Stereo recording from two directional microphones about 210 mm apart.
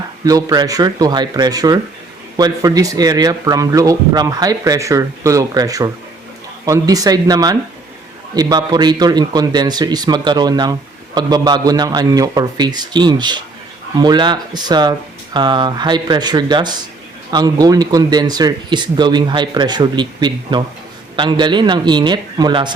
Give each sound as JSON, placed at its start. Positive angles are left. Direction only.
{"t": 0.3, "sound": "a man's voice", "side_deg": -15}